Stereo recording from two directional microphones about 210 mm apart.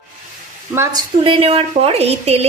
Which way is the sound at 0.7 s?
20° right (ahead or behind).